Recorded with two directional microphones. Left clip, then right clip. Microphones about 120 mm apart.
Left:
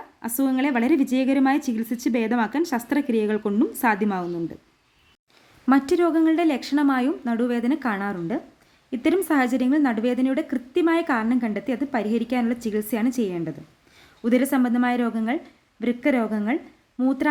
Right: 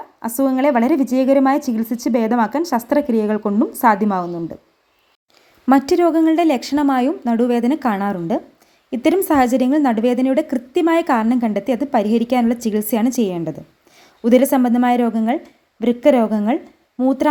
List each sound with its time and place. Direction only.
0.9 s speech: 10° left (ahead or behind)
2.2 s a woman's voice: 15° right (ahead or behind)
5.6 s a woman's voice: 40° right (ahead or behind)